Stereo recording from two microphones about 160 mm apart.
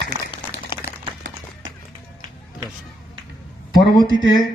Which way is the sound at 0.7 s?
30° left (ahead or behind).